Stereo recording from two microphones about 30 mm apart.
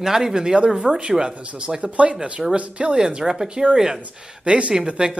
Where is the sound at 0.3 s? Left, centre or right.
Right.